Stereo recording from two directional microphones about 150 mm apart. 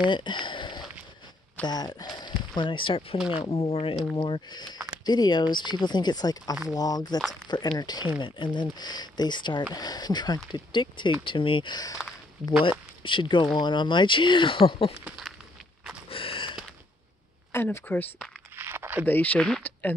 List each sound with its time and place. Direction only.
0.1 s a sound: 30° left (ahead or behind)
1.7 s speech: 25° left (ahead or behind)
15.0 s speech: centre (ahead or behind)
16.1 s gasp: 40° left (ahead or behind)
17.5 s speech: 15° left (ahead or behind)
18.6 s a sound: 15° right (ahead or behind)
19.0 s speech: 10° left (ahead or behind)